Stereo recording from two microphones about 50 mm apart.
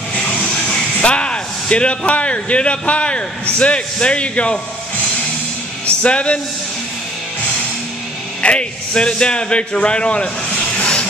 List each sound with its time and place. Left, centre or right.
0.1 s speech: left
5.9 s music: left
8.4 s a man's voice: left
10.8 s a sound: left